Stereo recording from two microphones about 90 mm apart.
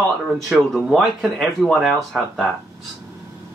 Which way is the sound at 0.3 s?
Centre (ahead or behind).